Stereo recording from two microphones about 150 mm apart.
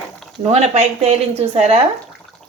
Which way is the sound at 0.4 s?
45° right (ahead or behind).